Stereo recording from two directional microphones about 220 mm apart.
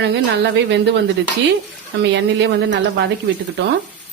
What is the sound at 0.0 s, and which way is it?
A woman's voice, 55° right (ahead or behind).